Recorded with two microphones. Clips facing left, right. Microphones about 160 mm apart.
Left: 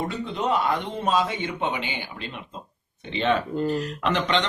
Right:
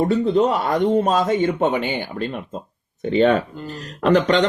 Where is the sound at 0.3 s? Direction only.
40° right (ahead or behind).